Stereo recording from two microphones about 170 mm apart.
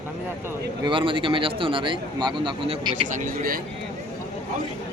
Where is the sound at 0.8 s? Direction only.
30° right (ahead or behind).